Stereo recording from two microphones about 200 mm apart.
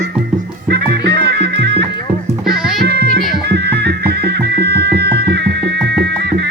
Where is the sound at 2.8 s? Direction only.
55° right (ahead or behind).